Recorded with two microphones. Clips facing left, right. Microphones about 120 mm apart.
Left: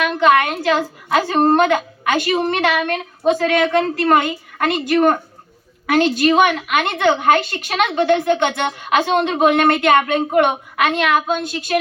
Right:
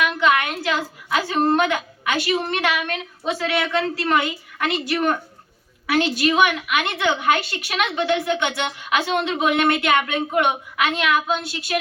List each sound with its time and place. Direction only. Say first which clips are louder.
0.0 s a woman's voice: left 5 dB; 40° left (ahead or behind)